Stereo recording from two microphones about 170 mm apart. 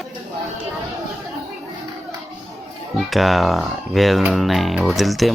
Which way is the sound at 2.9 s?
Centre (ahead or behind).